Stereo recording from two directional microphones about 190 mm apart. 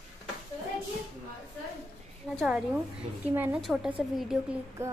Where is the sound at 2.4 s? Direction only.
Centre (ahead or behind).